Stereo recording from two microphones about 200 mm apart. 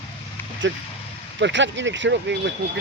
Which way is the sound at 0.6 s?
70° right (ahead or behind).